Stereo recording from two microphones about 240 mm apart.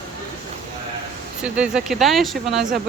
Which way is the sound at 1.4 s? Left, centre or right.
Centre.